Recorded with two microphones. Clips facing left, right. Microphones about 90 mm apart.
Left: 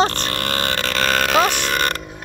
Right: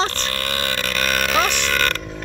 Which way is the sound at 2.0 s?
10° left (ahead or behind).